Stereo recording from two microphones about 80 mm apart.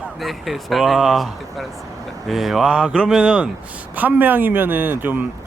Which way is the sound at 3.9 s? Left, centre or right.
Right.